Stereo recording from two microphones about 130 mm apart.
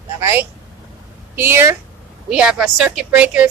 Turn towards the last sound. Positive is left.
turn(degrees=-10)  # may be behind; listen again after turning